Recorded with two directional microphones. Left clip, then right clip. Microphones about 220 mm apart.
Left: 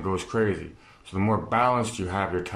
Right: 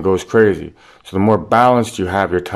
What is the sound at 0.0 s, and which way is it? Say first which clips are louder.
Speech: right 13 dB; 40° right (ahead or behind).